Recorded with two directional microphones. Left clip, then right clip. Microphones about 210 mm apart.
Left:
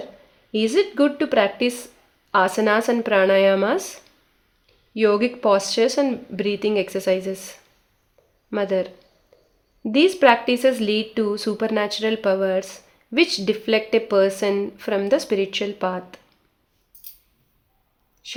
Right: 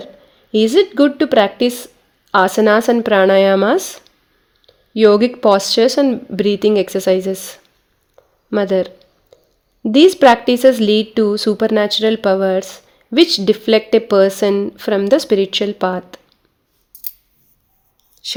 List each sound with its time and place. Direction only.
0.5 s a woman's voice: 40° right (ahead or behind)